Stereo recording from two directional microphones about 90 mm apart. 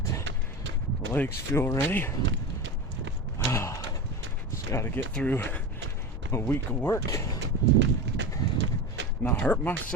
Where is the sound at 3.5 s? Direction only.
30° left (ahead or behind).